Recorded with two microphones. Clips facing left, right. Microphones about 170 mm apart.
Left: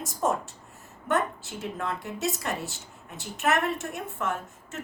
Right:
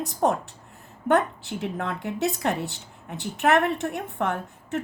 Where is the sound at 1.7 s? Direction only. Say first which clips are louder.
Right 3 dB; 65° right (ahead or behind).